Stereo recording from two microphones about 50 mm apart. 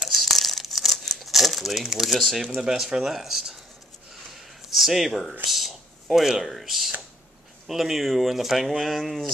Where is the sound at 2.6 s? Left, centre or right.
Centre.